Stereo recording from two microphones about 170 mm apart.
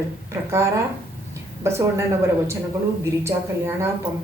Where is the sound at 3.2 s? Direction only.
15° right (ahead or behind).